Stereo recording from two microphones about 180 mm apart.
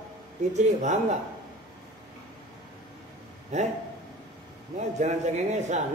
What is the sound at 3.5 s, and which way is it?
Speech, 40° right (ahead or behind).